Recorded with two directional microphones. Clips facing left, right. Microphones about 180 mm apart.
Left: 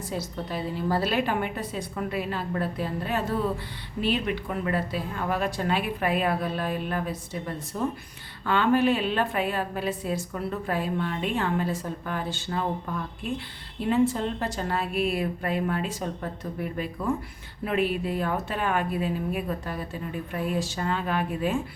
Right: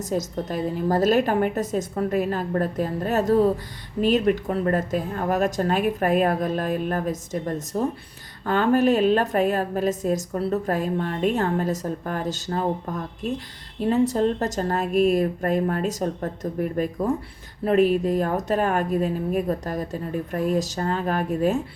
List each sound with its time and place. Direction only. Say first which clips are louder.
0.0 s a woman's voice: right 6 dB; 45° right (ahead or behind)